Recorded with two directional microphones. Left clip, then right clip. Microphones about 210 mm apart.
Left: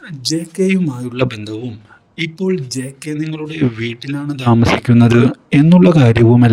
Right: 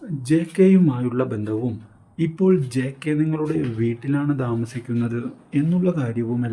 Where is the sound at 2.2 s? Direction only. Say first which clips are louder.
Left 4 dB; 40° left (ahead or behind).